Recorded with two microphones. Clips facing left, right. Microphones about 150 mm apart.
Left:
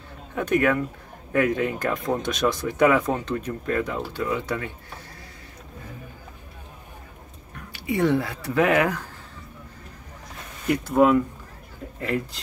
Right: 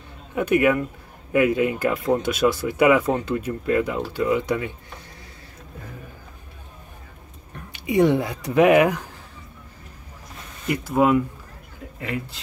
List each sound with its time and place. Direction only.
0.3 s speech: 10° right (ahead or behind)
7.7 s speech: 15° right (ahead or behind)
10.7 s speech: 5° right (ahead or behind)